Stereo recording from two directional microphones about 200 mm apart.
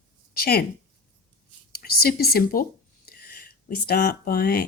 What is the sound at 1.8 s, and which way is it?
Speech, 50° left (ahead or behind).